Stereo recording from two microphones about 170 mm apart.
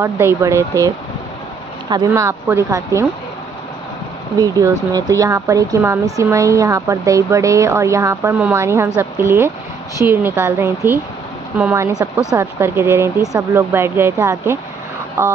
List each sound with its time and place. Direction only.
0.0 s a woman's voice: 15° right (ahead or behind)
4.4 s a woman's voice: 20° right (ahead or behind)